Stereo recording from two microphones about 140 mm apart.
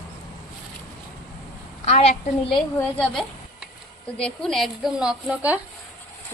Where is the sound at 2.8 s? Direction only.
10° left (ahead or behind); by 5.6 s 10° right (ahead or behind).